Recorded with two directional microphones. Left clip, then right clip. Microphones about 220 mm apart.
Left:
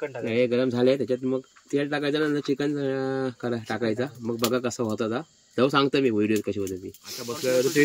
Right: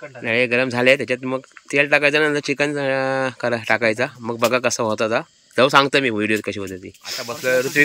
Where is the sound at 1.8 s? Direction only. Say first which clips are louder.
Right 10 dB; 30° right (ahead or behind).